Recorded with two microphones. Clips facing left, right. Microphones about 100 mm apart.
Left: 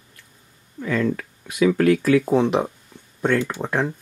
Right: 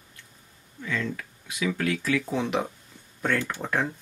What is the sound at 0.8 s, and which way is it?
Speech, 50° left (ahead or behind).